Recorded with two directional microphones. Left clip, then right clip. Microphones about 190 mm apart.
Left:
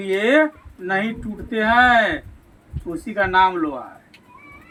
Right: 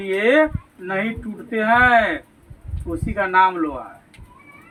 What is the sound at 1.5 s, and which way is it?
Speech, 30° left (ahead or behind).